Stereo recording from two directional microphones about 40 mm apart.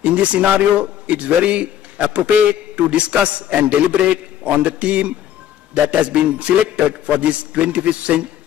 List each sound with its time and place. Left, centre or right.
0.0 s a man's voice: right